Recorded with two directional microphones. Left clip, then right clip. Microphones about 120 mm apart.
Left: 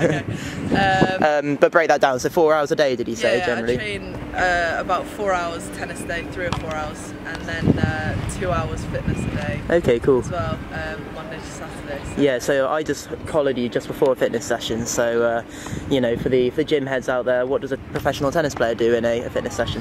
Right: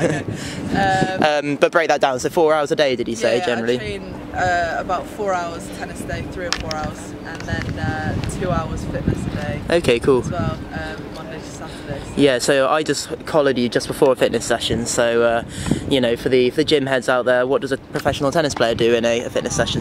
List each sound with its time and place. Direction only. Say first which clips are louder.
0.7 s speech: even; 5° left (ahead or behind)
1.2 s speech: even; 15° right (ahead or behind); by 6.5 s 5° left (ahead or behind)
7.5 s speech: left 3 dB; 5° left (ahead or behind)
9.7 s speech: right 1 dB; 20° right (ahead or behind)
12.2 s speech: right 3 dB; 15° right (ahead or behind)